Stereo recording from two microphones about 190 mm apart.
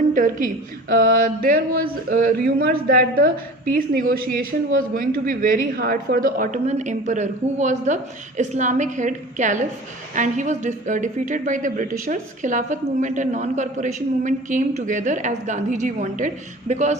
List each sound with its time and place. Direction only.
0.1 s speech: 45° right (ahead or behind)